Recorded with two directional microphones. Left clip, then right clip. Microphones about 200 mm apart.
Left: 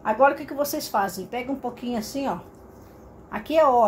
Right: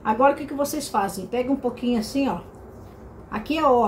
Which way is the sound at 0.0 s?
25° left (ahead or behind).